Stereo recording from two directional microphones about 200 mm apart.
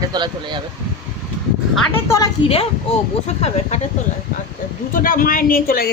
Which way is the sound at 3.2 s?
30° left (ahead or behind).